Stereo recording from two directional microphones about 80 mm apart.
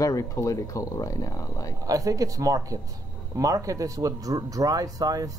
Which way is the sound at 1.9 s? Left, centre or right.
Right.